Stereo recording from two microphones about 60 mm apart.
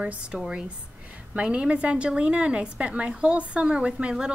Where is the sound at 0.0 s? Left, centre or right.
Right.